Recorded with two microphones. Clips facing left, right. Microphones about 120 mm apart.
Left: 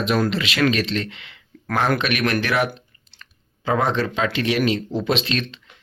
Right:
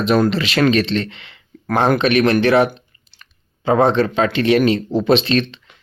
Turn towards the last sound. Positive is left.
turn(degrees=-35)  # may be behind; listen again after turning